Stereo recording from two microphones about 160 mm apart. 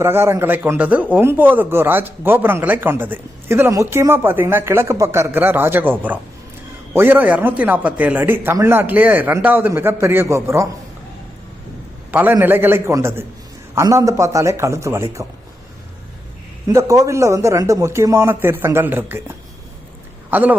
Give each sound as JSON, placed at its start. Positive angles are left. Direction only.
{"t": 0.0, "sound": "a man's voice", "side_deg": -15}
{"t": 12.1, "sound": "a man's voice", "side_deg": -10}
{"t": 16.6, "sound": "a man's voice", "side_deg": -20}
{"t": 20.3, "sound": "a man's voice", "side_deg": -10}